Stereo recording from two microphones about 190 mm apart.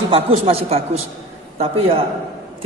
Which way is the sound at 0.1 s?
30° right (ahead or behind).